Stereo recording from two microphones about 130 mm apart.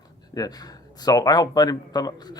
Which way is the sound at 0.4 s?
30° left (ahead or behind).